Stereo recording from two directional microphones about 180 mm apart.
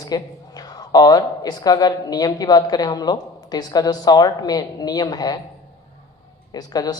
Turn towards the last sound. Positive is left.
turn(degrees=20)  # may be behind; listen again after turning